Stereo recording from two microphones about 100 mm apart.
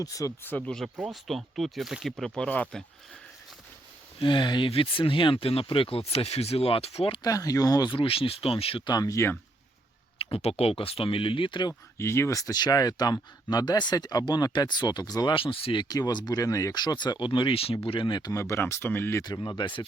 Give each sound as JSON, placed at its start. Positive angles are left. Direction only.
{"t": 0.0, "sound": "speech", "side_deg": 35}
{"t": 0.4, "sound": "speech", "side_deg": 15}
{"t": 1.0, "sound": "speech", "side_deg": 0}
{"t": 4.2, "sound": "speech", "side_deg": 55}
{"t": 4.7, "sound": "speech", "side_deg": 60}
{"t": 7.2, "sound": "speech", "side_deg": 35}
{"t": 7.9, "sound": "speech", "side_deg": 65}
{"t": 8.8, "sound": "speech", "side_deg": 40}
{"t": 10.2, "sound": "speech", "side_deg": 75}
{"t": 11.9, "sound": "speech", "side_deg": 25}
{"t": 15.4, "sound": "speech", "side_deg": 65}
{"t": 15.8, "sound": "speech", "side_deg": 40}
{"t": 18.3, "sound": "speech", "side_deg": 30}
{"t": 19.2, "sound": "speech", "side_deg": 45}